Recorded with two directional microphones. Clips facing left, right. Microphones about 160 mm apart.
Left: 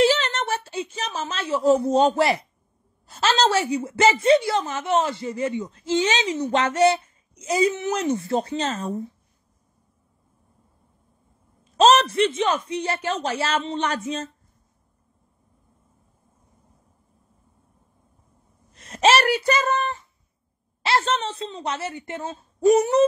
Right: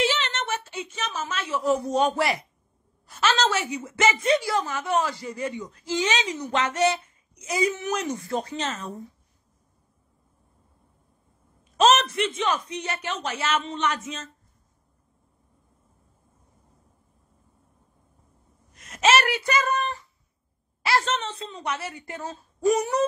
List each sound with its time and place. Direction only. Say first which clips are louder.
0.0 s a sound: left 6 dB; 35° left (ahead or behind)
3.1 s a woman's voice: left 3 dB; 30° left (ahead or behind)
11.7 s a man's voice: left 3 dB; 30° left (ahead or behind)
18.7 s a woman's voice: left 3 dB; 30° left (ahead or behind)